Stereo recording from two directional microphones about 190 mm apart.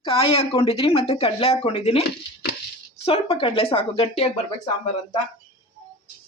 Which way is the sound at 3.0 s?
30° left (ahead or behind).